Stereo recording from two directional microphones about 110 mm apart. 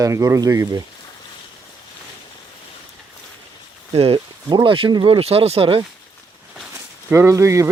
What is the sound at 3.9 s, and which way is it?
Speech, 55° right (ahead or behind).